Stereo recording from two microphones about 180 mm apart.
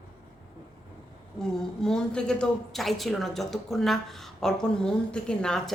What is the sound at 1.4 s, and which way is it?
A woman's voice, 5° left (ahead or behind).